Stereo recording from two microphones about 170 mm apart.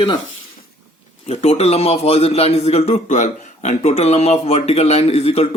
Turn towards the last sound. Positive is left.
turn(degrees=35)  # may be behind; listen again after turning